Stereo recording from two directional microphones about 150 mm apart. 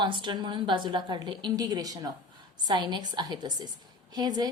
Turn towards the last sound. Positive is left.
turn(degrees=-25)  # may be behind; listen again after turning